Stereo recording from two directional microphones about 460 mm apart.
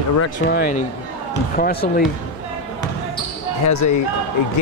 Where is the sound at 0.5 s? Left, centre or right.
Centre.